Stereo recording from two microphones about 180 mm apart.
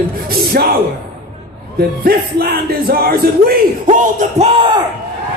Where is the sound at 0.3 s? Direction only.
60° right (ahead or behind).